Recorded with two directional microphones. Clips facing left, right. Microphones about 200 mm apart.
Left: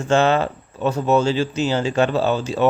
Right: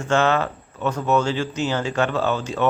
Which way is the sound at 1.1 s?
10° left (ahead or behind).